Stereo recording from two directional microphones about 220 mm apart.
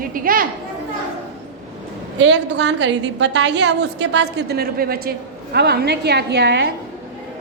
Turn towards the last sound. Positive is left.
turn(degrees=-50)  # may be behind; listen again after turning